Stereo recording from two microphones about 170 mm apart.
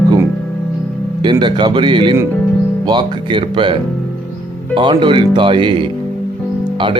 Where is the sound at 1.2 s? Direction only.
25° right (ahead or behind).